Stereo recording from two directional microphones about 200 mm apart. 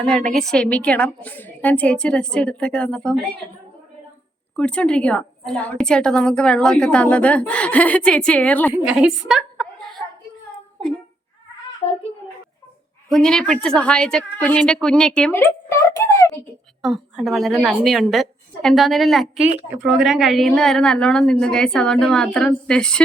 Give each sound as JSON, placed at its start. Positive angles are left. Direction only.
{"t": 0.0, "sound": "a woman's voice", "side_deg": 5}
{"t": 4.5, "sound": "a woman's voice", "side_deg": 5}
{"t": 8.7, "sound": "a sound", "side_deg": -5}
{"t": 11.8, "sound": "a child's voice", "side_deg": 20}
{"t": 13.1, "sound": "a woman's voice", "side_deg": 0}
{"t": 16.8, "sound": "a woman's voice", "side_deg": 0}